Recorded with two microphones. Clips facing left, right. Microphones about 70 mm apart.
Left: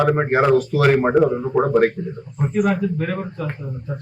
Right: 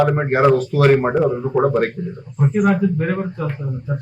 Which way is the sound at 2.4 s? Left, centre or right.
Centre.